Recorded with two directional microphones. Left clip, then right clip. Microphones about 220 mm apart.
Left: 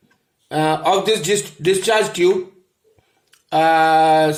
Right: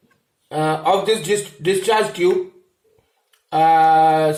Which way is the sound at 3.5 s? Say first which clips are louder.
Right 1 dB; 55° left (ahead or behind).